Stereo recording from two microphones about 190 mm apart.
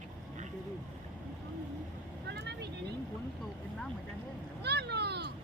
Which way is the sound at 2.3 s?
60° right (ahead or behind).